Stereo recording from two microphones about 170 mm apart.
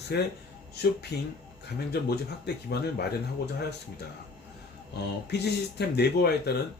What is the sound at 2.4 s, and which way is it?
Speech, 70° left (ahead or behind).